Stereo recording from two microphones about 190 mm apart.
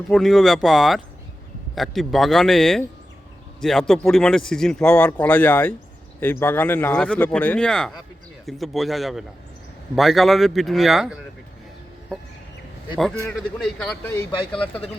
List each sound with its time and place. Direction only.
0.1 s speech: centre (ahead or behind)
13.3 s speech: centre (ahead or behind)
14.1 s speech: 20° left (ahead or behind)